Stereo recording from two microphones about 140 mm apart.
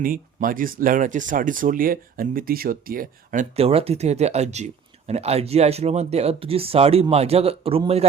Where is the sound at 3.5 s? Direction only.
45° right (ahead or behind).